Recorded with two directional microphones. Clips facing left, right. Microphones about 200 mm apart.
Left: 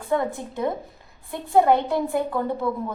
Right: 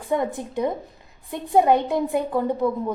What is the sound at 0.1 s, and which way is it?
A woman's voice, 15° right (ahead or behind).